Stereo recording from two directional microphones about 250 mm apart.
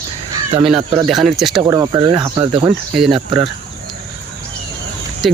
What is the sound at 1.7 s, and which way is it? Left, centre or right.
Speech, centre.